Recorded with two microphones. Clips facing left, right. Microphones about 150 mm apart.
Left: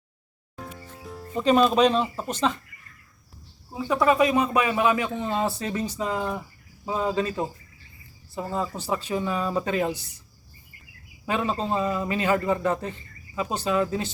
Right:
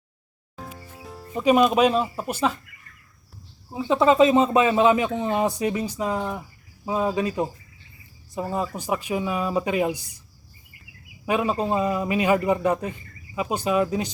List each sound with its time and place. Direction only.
1.4 s a man's voice: 10° right (ahead or behind)
3.7 s a man's voice: 20° right (ahead or behind)
11.3 s a man's voice: 15° right (ahead or behind)